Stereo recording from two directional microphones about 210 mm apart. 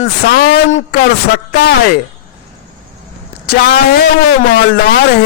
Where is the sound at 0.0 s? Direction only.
45° left (ahead or behind).